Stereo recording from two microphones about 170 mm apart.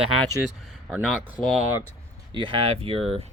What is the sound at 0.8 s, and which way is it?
Speech, 5° right (ahead or behind).